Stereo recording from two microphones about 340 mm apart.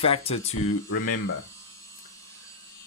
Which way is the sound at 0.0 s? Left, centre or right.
Centre.